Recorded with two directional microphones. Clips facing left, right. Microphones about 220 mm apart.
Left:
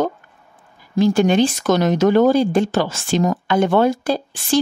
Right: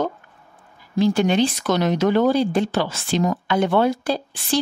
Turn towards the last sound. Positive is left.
turn(degrees=45)  # may be behind; listen again after turning